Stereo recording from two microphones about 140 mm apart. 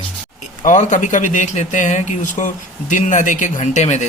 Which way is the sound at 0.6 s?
60° left (ahead or behind).